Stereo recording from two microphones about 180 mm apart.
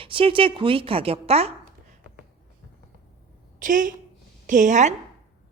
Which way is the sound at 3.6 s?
50° right (ahead or behind).